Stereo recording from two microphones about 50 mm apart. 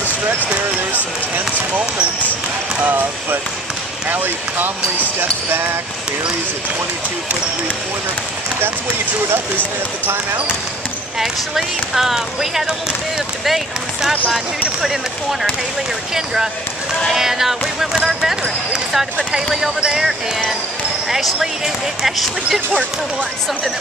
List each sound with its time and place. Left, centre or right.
2.8 s speech: right
5.2 s basketball bounce: right
11.1 s speech: centre
17.1 s speech: centre